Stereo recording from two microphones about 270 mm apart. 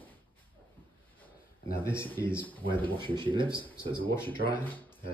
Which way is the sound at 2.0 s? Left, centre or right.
Centre.